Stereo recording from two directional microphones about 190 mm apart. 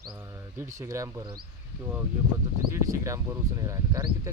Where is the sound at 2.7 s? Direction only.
15° right (ahead or behind).